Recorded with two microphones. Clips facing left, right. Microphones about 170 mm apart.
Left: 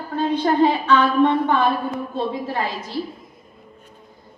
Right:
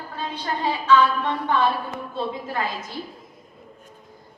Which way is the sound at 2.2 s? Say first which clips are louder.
Left 2 dB; 35° left (ahead or behind).